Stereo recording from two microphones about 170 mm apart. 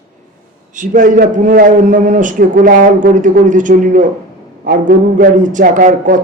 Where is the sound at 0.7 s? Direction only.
50° right (ahead or behind).